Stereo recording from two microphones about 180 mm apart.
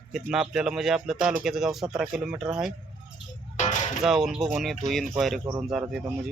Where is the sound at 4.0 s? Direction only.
Centre (ahead or behind).